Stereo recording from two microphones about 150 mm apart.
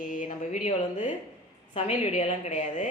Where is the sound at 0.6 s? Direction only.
55° left (ahead or behind).